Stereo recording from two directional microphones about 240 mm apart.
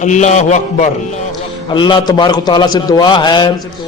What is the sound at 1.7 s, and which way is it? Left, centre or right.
A man's voice, centre.